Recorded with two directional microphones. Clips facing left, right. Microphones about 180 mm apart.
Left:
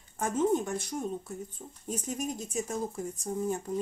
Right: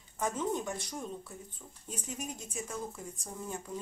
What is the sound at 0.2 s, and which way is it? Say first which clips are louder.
Speech: left 6 dB; 50° left (ahead or behind).